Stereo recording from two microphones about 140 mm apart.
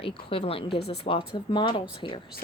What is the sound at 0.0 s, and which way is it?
Speech, 40° left (ahead or behind).